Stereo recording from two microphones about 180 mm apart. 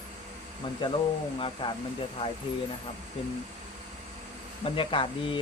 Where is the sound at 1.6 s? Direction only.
25° left (ahead or behind).